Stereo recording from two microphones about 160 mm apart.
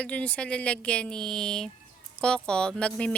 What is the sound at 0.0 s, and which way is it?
A woman's voice, 10° left (ahead or behind).